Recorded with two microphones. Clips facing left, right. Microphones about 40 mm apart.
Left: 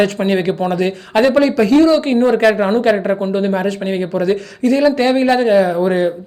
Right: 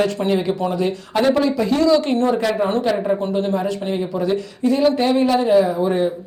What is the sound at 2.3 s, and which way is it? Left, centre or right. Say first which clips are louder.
A woman's voice: left 6 dB; left.